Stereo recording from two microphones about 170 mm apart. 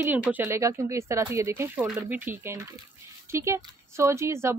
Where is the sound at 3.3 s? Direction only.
15° right (ahead or behind).